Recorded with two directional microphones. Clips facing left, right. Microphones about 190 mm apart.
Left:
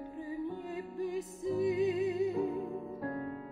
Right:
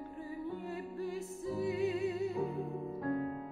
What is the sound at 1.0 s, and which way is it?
Music, 15° left (ahead or behind).